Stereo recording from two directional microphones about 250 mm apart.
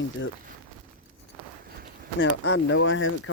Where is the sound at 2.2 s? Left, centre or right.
Left.